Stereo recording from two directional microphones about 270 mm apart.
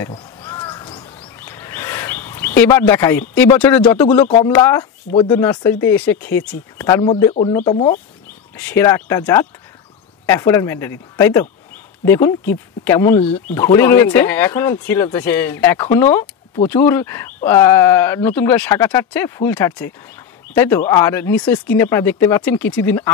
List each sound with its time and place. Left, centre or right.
0.0 s crow: centre
1.4 s bird: centre
3.9 s speech: centre
8.5 s speech: centre